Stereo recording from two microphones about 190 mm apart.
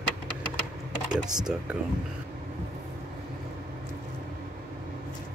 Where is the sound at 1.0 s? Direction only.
5° right (ahead or behind).